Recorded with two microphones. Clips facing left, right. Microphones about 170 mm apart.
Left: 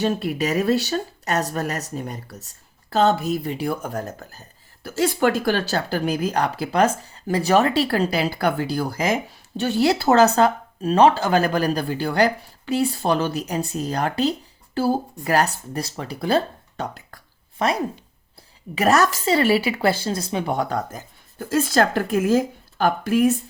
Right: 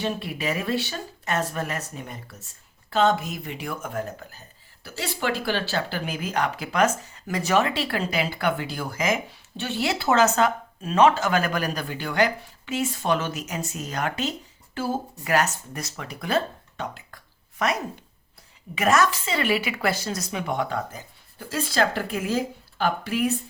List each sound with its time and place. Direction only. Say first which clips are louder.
0.0 s speech: left 6 dB; 40° left (ahead or behind)